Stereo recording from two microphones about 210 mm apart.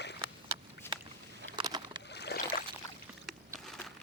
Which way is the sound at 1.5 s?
20° right (ahead or behind).